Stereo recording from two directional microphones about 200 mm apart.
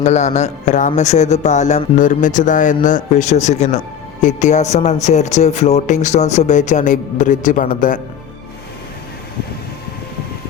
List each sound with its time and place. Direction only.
0.0 s speech: 35° left (ahead or behind)